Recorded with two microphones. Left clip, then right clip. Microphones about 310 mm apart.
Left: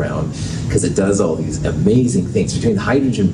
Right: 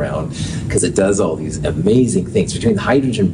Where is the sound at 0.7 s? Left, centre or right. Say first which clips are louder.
Right 2 dB; right.